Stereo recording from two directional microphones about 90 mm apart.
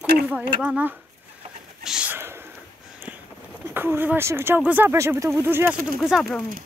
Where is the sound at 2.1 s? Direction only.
25° right (ahead or behind).